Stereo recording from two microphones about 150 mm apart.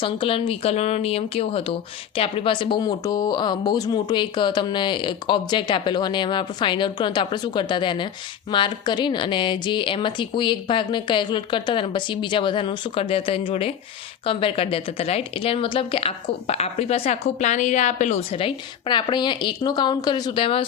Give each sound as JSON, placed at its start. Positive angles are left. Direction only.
{"t": 0.0, "sound": "speech", "side_deg": 35}
{"t": 18.3, "sound": "speech", "side_deg": 35}